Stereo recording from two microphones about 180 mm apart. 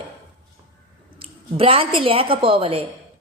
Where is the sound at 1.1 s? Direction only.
30° right (ahead or behind).